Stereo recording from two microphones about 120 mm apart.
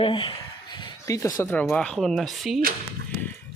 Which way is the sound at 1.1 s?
30° left (ahead or behind).